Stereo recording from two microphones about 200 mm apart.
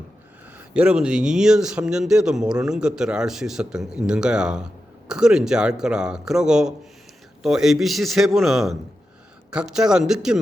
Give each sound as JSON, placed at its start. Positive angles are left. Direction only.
{"t": 0.7, "sound": "speech", "side_deg": -5}